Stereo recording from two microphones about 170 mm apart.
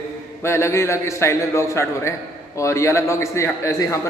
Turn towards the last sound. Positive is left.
turn(degrees=20)  # may be behind; listen again after turning